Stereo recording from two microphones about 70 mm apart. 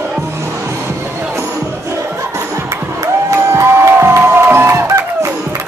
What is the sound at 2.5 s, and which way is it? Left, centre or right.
Music, right.